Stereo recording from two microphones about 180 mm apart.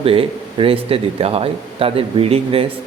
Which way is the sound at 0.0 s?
30° right (ahead or behind).